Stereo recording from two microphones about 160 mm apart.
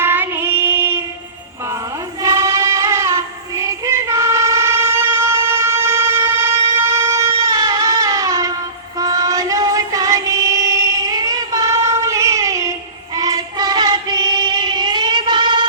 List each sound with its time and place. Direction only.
0.0 s child singing: 15° right (ahead or behind)
2.2 s child singing: 20° right (ahead or behind)
6.8 s music: 15° right (ahead or behind)
7.3 s music: 35° right (ahead or behind)
7.5 s music: 25° right (ahead or behind)
9.0 s child singing: 25° right (ahead or behind)